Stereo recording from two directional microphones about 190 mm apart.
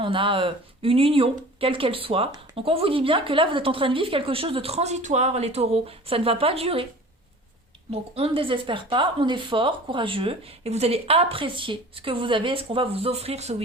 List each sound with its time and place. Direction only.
0.0 s speech: 25° right (ahead or behind)
7.9 s speech: 30° right (ahead or behind)